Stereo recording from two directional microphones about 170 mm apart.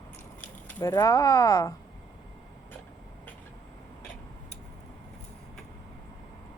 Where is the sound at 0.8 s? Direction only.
20° left (ahead or behind).